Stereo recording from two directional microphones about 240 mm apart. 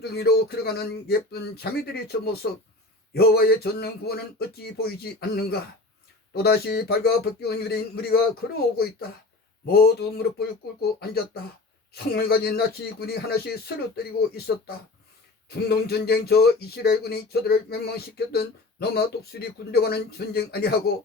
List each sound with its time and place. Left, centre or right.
0.0 s speech: left